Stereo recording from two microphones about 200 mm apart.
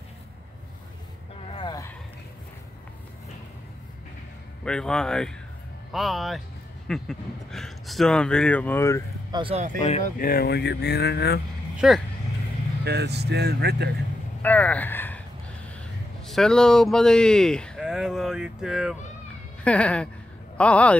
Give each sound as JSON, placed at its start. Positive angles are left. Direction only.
{"t": 1.5, "sound": "a sound", "side_deg": 20}
{"t": 4.6, "sound": "speech", "side_deg": 5}
{"t": 9.3, "sound": "speech", "side_deg": -25}
{"t": 9.8, "sound": "speech", "side_deg": 30}
{"t": 10.1, "sound": "speech", "side_deg": 45}
{"t": 11.8, "sound": "speech", "side_deg": 0}
{"t": 12.8, "sound": "speech", "side_deg": -55}
{"t": 14.4, "sound": "speech", "side_deg": 10}
{"t": 16.3, "sound": "speech", "side_deg": 0}